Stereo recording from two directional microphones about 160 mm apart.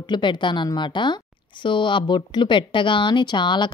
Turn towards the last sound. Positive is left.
turn(degrees=30)  # may be behind; listen again after turning